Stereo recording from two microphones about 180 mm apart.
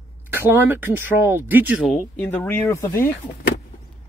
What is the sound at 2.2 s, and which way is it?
Speech, 10° left (ahead or behind).